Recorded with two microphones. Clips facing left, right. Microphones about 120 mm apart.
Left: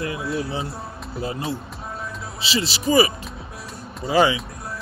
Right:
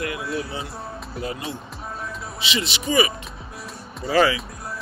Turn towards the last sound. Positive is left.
turn(degrees=20)  # may be behind; listen again after turning